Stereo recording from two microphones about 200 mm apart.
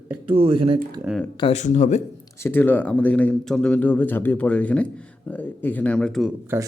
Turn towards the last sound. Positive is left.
turn(degrees=-10)  # may be behind; listen again after turning